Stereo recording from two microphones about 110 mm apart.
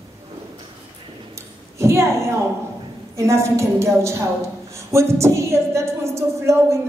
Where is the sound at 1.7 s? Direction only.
25° right (ahead or behind).